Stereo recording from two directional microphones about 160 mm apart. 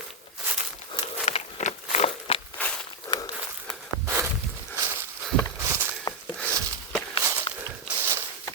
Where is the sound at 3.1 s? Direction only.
30° left (ahead or behind).